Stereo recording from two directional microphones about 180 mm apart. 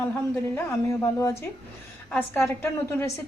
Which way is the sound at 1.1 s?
15° left (ahead or behind).